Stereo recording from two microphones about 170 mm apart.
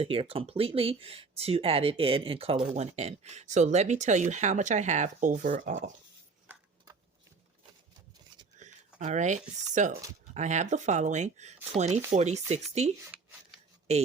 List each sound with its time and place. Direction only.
0.0 s speech: 35° right (ahead or behind)
8.5 s speech: 45° right (ahead or behind)